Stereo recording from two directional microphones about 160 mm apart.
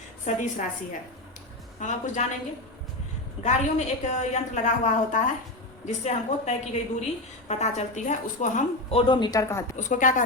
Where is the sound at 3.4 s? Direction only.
45° left (ahead or behind).